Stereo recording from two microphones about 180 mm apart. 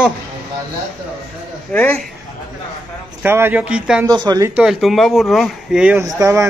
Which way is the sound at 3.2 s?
10° right (ahead or behind).